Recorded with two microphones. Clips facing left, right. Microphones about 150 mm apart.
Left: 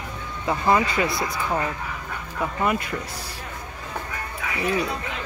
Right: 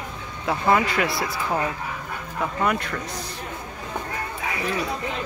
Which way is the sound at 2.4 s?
5° left (ahead or behind).